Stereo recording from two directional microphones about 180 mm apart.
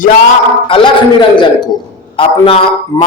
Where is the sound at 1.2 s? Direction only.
25° left (ahead or behind).